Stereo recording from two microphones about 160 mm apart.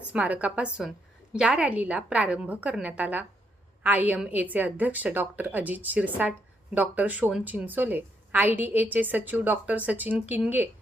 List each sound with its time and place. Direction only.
0.1 s a woman's voice: 10° right (ahead or behind)